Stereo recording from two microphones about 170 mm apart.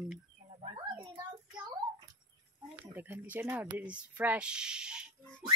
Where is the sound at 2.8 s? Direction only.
10° right (ahead or behind).